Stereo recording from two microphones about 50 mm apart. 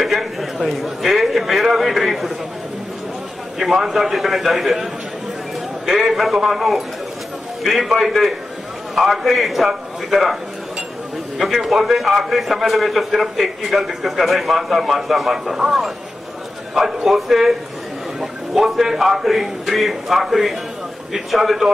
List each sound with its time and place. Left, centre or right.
0.0 s a sound: centre
0.7 s a man's voice: centre
3.7 s a man's voice: centre
5.9 s a man's voice: centre
11.4 s a man's voice: centre
16.7 s a man's voice: centre
20.2 s a man's voice: centre
21.1 s a man's voice: centre